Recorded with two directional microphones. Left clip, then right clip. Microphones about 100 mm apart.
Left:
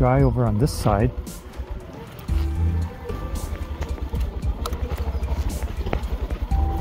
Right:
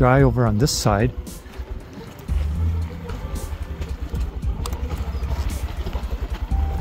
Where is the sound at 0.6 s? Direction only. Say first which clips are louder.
Right 2 dB; 15° right (ahead or behind).